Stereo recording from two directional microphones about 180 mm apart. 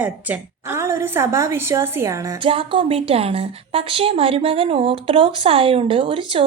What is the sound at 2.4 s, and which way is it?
Speech, 30° right (ahead or behind).